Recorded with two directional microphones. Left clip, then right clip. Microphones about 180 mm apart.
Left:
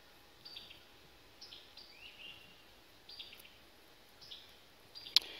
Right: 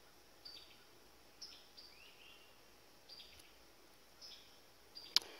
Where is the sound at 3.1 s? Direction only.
65° right (ahead or behind).